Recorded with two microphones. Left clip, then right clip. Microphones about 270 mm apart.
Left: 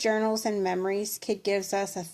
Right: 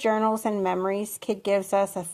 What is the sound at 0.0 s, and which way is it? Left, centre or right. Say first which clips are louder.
Speech: right 3 dB; centre.